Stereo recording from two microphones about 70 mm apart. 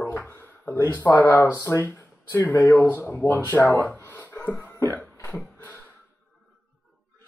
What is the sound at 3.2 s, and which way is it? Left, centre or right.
Speech, left.